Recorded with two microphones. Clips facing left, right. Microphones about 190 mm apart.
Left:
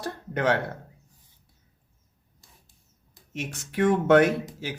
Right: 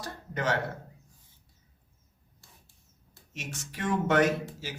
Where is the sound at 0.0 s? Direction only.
60° left (ahead or behind).